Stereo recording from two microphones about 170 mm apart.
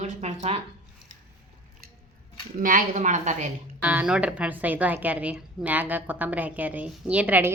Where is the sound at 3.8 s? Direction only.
10° right (ahead or behind).